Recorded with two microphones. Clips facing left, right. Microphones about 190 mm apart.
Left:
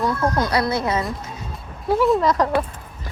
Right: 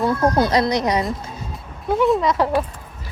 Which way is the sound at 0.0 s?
30° right (ahead or behind).